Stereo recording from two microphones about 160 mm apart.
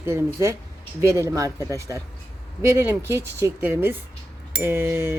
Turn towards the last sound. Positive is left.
turn(degrees=-15)  # may be behind; listen again after turning